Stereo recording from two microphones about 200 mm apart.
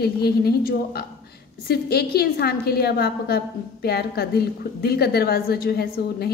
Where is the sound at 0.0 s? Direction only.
50° left (ahead or behind).